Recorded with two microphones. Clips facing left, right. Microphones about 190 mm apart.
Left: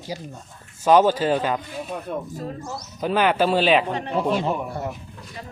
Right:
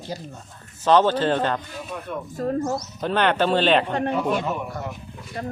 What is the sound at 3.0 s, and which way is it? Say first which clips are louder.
Speech: left 2 dB; 5° left (ahead or behind).